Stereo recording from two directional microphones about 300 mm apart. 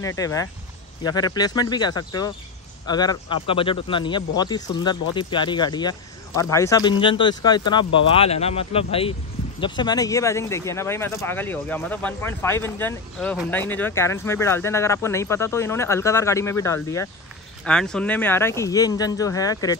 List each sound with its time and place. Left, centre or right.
0.0 s speech: centre